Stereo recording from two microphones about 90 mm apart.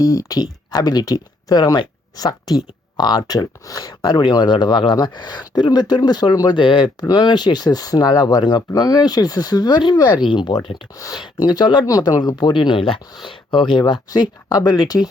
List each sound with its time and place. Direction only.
0.0 s speech: 45° left (ahead or behind)
4.0 s speech: 60° left (ahead or behind)
7.1 s speech: 55° left (ahead or behind)
10.9 s speech: 40° left (ahead or behind)
11.2 s speech: 55° left (ahead or behind)
12.3 s speech: 60° left (ahead or behind)